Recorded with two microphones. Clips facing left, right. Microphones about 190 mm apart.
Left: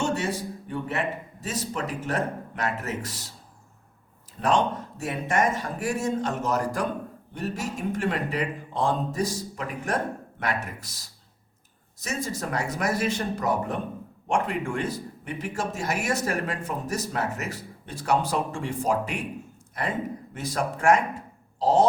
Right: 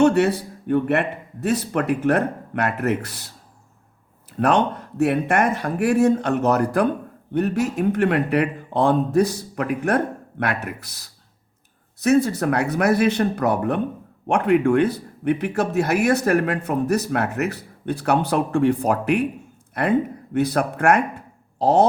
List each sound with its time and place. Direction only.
0.0 s speech: 65° right (ahead or behind)
4.4 s speech: 65° right (ahead or behind)